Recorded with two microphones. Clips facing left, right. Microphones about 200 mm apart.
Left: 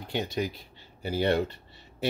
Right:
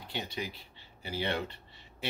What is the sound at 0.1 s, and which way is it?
Cutlery, 45° left (ahead or behind).